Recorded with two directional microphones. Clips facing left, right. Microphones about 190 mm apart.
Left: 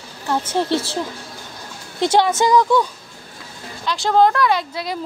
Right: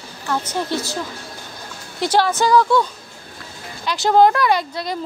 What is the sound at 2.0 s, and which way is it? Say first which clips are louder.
Speech: left 2 dB; 25° left (ahead or behind).